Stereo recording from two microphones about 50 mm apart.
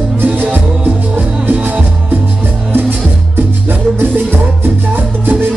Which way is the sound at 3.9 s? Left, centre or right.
Right.